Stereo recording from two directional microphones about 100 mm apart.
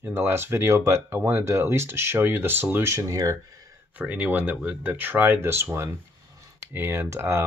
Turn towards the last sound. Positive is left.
turn(degrees=-25)  # may be behind; listen again after turning